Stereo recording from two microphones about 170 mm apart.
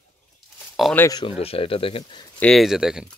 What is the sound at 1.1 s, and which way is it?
Speech, 25° left (ahead or behind).